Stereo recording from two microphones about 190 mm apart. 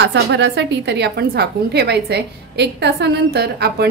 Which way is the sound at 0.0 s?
65° right (ahead or behind).